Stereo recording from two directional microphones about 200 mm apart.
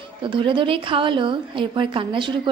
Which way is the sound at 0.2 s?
25° right (ahead or behind).